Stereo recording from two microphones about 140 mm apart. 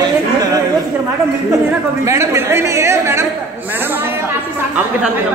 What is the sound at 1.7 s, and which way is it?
A woman's voice, 20° right (ahead or behind).